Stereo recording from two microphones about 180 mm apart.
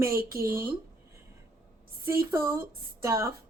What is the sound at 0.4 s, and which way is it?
Speech, 10° right (ahead or behind).